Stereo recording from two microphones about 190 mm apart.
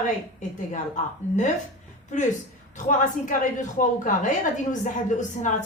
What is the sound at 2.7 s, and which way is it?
A woman's voice, 45° left (ahead or behind).